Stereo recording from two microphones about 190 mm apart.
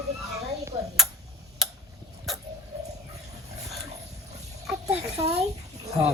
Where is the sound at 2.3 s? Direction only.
Centre (ahead or behind).